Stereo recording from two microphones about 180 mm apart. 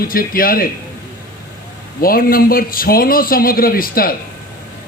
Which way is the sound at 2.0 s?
55° left (ahead or behind).